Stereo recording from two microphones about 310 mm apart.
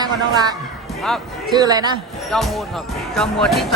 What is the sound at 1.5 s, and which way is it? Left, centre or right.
Speech, centre.